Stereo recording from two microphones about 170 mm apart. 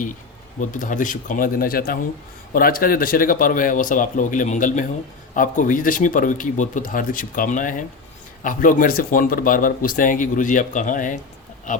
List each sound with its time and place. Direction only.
0.6 s speech: 50° left (ahead or behind)